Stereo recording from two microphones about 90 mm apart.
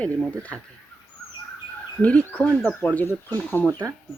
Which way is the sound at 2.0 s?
15° left (ahead or behind).